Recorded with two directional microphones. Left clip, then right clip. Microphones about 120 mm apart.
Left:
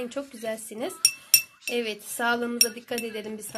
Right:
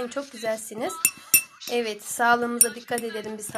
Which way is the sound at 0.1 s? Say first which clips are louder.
Right 4 dB; centre (ahead or behind).